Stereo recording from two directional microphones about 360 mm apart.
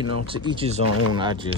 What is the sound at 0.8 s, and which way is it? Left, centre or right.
Speech, left.